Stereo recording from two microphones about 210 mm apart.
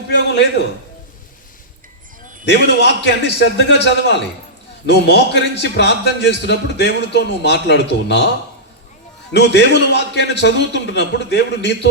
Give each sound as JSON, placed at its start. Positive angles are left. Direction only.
{"t": 0.2, "sound": "a man's voice", "side_deg": 55}
{"t": 2.4, "sound": "a man's voice", "side_deg": 55}
{"t": 9.3, "sound": "a man's voice", "side_deg": 55}